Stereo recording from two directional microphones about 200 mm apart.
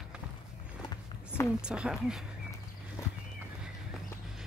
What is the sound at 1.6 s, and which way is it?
Speech, 5° right (ahead or behind).